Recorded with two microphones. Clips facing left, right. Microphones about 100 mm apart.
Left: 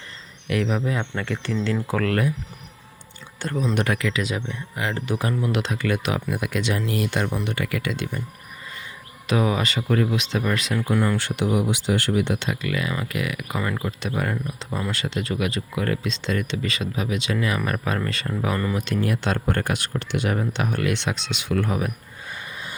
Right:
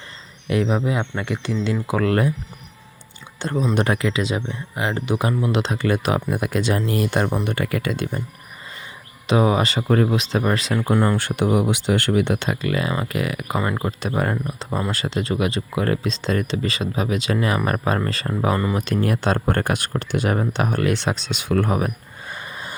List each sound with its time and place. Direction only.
0.4 s speech: 25° right (ahead or behind)
3.4 s speech: 20° right (ahead or behind); by 8.2 s 40° right (ahead or behind)
9.2 s speech: 30° right (ahead or behind)
11.2 s speech: 50° right (ahead or behind)